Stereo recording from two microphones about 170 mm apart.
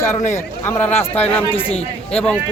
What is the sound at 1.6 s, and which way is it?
Speech, 35° left (ahead or behind).